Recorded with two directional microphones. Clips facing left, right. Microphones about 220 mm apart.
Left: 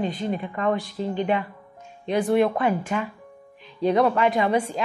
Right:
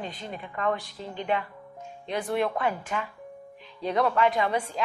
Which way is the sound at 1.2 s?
15° left (ahead or behind).